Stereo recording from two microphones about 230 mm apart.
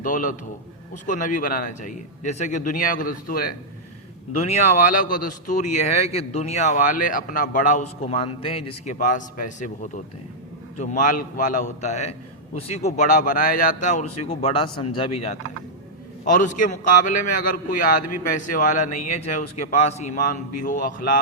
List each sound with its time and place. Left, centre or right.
0.0 s speech: left
4.4 s speech: left